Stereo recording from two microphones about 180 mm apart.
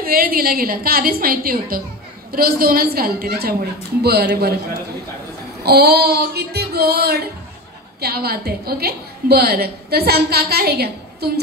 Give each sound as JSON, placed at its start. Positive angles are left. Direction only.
{"t": 0.0, "sound": "a woman's voice", "side_deg": -55}
{"t": 5.6, "sound": "a woman's voice", "side_deg": -60}